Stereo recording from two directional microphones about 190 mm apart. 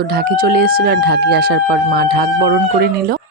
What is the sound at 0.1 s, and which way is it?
Speech, 55° right (ahead or behind).